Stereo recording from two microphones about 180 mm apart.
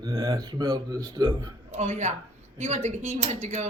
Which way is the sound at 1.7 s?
35° right (ahead or behind).